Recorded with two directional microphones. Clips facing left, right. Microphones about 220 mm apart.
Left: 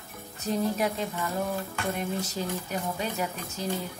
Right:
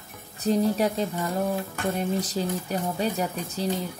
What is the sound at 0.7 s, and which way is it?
Speech, 35° right (ahead or behind).